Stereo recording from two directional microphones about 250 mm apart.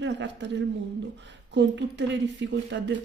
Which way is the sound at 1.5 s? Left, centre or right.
Right.